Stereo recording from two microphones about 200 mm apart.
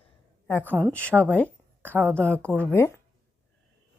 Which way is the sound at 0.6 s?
10° right (ahead or behind).